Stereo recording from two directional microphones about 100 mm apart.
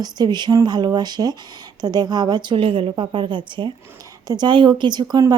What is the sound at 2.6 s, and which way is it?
Speech, 65° right (ahead or behind).